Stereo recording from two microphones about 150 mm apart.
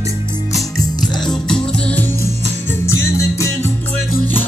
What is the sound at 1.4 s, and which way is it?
Music, 5° left (ahead or behind).